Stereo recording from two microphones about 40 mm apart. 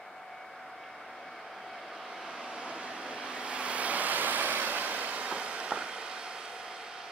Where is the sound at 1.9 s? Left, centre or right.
Centre.